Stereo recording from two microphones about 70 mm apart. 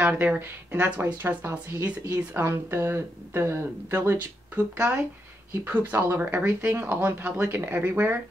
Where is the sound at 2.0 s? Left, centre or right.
Right.